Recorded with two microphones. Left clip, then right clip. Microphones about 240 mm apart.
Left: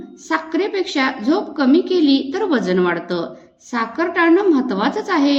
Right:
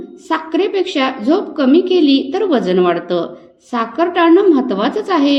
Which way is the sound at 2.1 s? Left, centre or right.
Centre.